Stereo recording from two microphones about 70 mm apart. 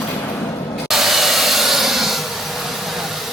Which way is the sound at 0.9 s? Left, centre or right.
Centre.